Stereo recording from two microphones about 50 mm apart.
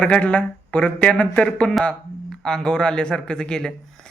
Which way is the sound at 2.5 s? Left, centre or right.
Centre.